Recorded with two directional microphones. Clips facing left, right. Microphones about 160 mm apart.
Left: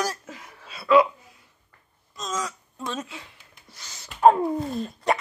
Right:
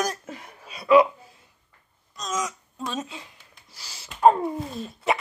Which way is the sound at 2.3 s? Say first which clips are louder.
Right 2 dB; 15° right (ahead or behind).